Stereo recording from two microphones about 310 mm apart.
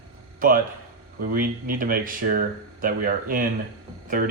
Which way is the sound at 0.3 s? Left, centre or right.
Right.